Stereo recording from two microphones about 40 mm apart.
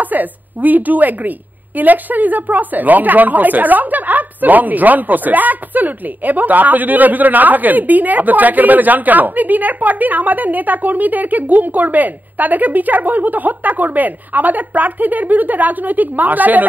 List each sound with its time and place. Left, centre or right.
0.0 s a woman's voice: right